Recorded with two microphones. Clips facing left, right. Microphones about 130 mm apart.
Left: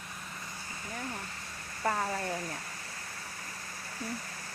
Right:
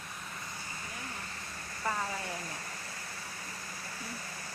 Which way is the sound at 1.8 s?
40° left (ahead or behind).